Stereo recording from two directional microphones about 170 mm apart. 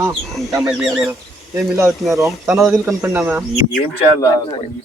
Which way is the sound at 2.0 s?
Centre (ahead or behind).